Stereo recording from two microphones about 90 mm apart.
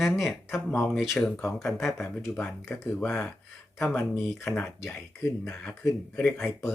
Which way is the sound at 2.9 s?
20° left (ahead or behind).